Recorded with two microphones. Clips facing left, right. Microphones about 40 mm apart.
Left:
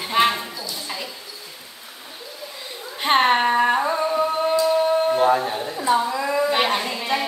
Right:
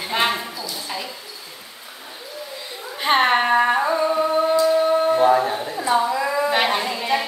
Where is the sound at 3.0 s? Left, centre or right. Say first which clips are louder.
Even; centre.